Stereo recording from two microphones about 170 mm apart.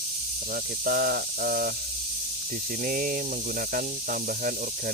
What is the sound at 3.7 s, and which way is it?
Speech, 55° right (ahead or behind).